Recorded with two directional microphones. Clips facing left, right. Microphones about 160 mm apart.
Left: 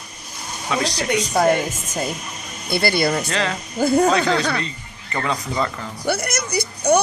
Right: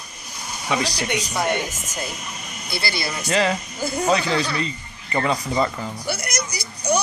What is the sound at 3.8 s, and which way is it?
Speech, 55° left (ahead or behind).